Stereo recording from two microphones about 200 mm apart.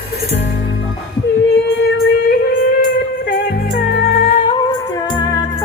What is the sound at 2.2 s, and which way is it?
Music, 50° left (ahead or behind).